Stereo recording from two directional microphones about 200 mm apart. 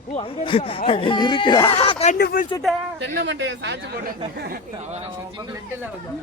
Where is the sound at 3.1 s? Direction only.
60° right (ahead or behind).